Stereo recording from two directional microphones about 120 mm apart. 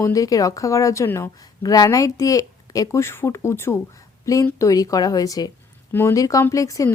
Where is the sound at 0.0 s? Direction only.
30° left (ahead or behind).